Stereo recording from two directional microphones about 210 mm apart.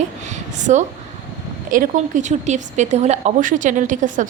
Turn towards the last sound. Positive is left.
turn(degrees=-35)  # may be behind; listen again after turning